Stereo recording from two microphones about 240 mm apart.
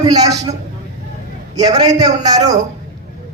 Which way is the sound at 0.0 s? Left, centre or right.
Centre.